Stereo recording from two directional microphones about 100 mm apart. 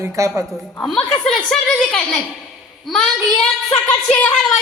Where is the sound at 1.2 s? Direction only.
5° left (ahead or behind).